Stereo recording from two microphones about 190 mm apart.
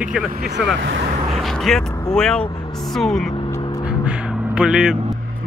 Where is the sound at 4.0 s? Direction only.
5° right (ahead or behind).